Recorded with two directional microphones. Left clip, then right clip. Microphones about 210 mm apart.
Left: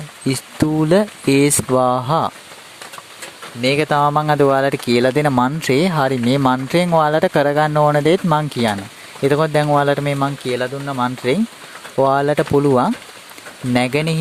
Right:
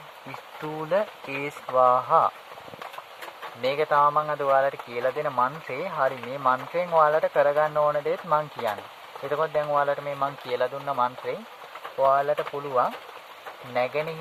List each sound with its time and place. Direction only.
0.8 s speech: 50° left (ahead or behind)
3.6 s speech: 35° left (ahead or behind)
10.5 s speech: 25° left (ahead or behind)
11.9 s speech: 50° left (ahead or behind)